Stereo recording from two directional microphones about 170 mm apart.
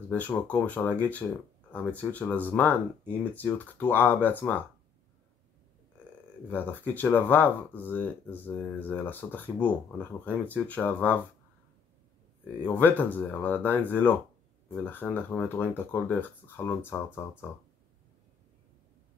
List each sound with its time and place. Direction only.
0.1 s speech: 10° left (ahead or behind)
6.5 s speech: 10° left (ahead or behind)
12.6 s speech: 10° left (ahead or behind)